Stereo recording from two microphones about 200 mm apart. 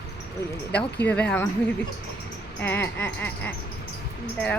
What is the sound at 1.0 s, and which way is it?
Speech, 5° left (ahead or behind).